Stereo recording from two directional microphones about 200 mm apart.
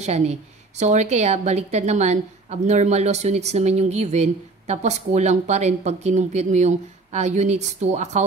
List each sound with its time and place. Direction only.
0.0 s a woman's voice: 35° right (ahead or behind)